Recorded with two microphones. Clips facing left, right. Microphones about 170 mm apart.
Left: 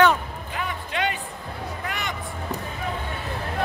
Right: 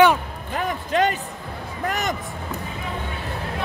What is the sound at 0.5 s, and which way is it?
Music, 45° right (ahead or behind).